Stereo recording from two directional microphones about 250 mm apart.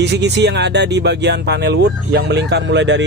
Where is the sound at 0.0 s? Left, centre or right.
Right.